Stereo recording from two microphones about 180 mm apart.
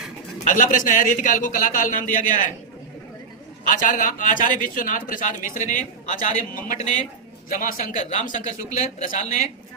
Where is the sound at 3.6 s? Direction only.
45° left (ahead or behind).